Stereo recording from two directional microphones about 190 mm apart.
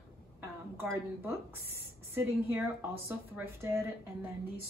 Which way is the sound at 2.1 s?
10° right (ahead or behind).